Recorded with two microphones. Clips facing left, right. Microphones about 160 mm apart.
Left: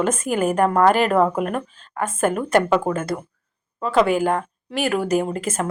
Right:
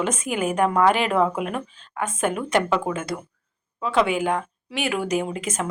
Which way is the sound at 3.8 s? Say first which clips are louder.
Left 3 dB; centre (ahead or behind).